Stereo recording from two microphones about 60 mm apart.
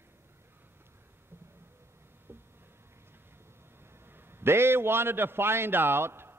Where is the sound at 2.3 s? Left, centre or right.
Right.